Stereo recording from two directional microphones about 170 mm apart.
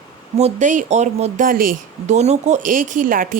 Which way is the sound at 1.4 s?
55° right (ahead or behind).